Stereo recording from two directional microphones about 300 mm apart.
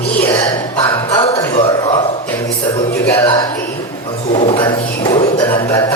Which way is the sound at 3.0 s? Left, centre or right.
Centre.